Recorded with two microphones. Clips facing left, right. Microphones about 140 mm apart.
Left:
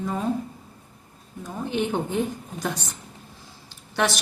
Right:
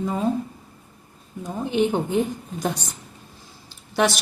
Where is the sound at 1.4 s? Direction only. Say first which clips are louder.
Right 5 dB; 15° right (ahead or behind).